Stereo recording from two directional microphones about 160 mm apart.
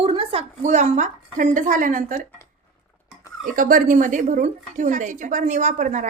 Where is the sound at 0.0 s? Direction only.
35° right (ahead or behind); by 2.2 s 55° right (ahead or behind).